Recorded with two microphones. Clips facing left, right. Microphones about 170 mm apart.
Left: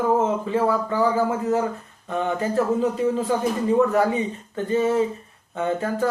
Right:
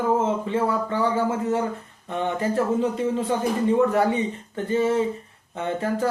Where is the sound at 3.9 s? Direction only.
30° right (ahead or behind).